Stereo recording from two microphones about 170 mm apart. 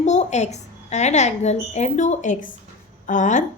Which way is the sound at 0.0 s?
45° left (ahead or behind).